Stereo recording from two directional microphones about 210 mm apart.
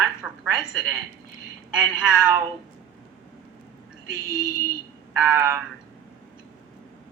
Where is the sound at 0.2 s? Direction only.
5° right (ahead or behind).